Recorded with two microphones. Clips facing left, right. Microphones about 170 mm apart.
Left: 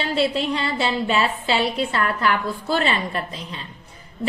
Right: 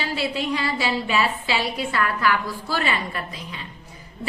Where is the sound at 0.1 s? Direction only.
25° left (ahead or behind).